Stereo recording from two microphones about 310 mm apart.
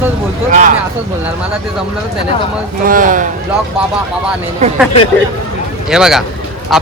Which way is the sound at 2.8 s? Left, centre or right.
Right.